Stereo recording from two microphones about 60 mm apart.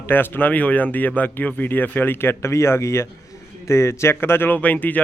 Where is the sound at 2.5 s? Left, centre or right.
Left.